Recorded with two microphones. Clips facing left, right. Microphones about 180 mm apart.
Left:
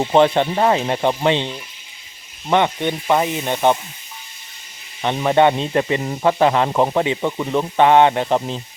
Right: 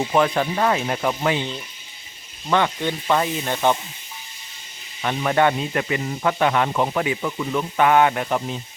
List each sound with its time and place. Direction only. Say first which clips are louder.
0.0 s speech: left 5 dB; 30° left (ahead or behind)
2.5 s speech: left 3 dB; 20° left (ahead or behind)
5.0 s speech: left 4 dB; 20° left (ahead or behind)